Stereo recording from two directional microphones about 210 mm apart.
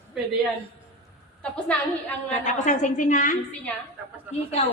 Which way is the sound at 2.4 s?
35° left (ahead or behind).